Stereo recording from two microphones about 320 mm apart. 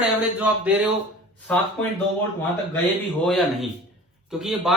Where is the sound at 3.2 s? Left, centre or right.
Centre.